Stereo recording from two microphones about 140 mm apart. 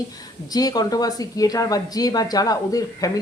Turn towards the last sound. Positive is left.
turn(degrees=25)  # may be behind; listen again after turning